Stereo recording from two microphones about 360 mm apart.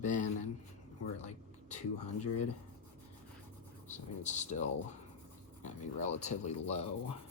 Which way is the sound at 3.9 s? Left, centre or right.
Centre.